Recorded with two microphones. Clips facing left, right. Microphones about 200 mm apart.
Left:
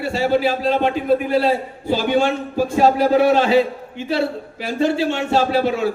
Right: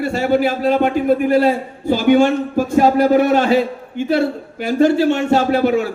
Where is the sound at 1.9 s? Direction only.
45° right (ahead or behind).